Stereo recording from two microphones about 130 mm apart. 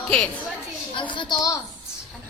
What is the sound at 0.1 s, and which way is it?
Speech, 10° left (ahead or behind).